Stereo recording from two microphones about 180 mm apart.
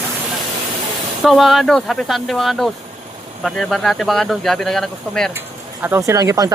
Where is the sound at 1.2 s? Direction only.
Centre (ahead or behind).